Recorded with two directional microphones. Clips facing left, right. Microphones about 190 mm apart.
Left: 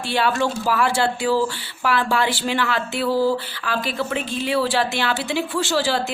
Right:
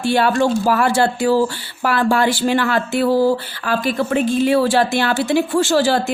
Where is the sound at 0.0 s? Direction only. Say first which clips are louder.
Right 5 dB; 45° right (ahead or behind).